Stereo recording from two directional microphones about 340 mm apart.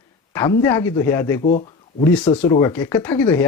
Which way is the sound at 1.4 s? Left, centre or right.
Left.